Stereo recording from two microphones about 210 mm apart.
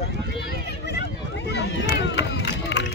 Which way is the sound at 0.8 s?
50° left (ahead or behind).